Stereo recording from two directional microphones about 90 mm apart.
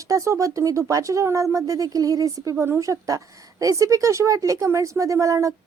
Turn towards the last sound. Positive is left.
turn(degrees=-35)  # may be behind; listen again after turning